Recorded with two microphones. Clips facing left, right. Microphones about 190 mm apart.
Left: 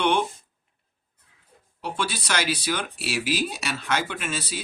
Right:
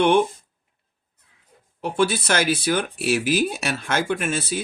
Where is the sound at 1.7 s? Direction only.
50° right (ahead or behind).